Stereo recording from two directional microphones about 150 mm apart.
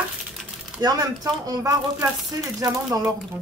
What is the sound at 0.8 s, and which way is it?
Speech, 25° right (ahead or behind).